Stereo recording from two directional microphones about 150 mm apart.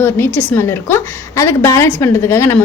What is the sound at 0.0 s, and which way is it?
A woman's voice, 15° left (ahead or behind).